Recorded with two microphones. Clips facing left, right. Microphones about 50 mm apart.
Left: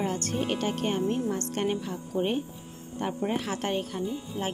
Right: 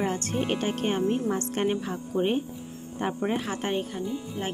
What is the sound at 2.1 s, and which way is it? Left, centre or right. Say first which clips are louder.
Speech: right 2 dB; centre.